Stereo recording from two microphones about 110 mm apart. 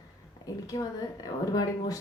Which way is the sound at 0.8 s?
40° left (ahead or behind).